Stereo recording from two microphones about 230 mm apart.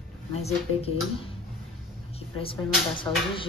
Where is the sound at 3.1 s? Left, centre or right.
Centre.